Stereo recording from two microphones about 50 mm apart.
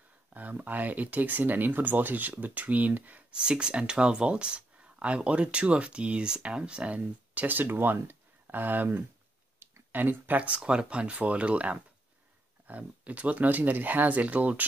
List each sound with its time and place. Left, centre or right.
0.3 s speech: right
3.3 s speech: centre
7.0 s speech: right
9.6 s a sound: right
9.9 s speech: right
10.4 s speech: right